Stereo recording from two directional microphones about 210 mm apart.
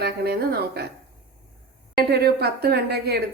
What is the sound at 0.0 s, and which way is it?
Speech, 50° right (ahead or behind).